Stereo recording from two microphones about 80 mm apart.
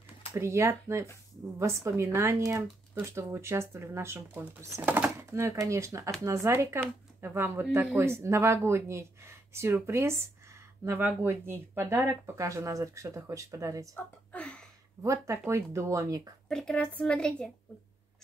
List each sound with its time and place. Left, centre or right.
0.3 s speech: right
4.8 s speech: right
5.3 s speech: right
13.9 s a woman's voice: centre
15.0 s speech: right
16.4 s a woman's voice: centre